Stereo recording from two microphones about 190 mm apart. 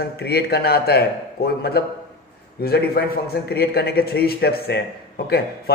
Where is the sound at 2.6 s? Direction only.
55° left (ahead or behind).